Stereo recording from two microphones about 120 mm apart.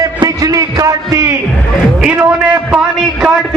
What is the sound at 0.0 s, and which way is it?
Music, 30° right (ahead or behind).